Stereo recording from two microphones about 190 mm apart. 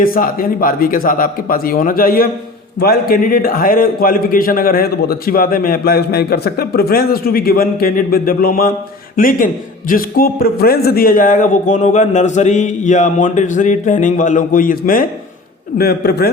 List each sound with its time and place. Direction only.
0.0 s a man's voice: 50° left (ahead or behind)